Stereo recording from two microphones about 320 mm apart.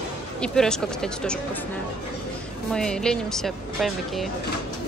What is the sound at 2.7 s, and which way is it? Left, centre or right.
Speech, centre.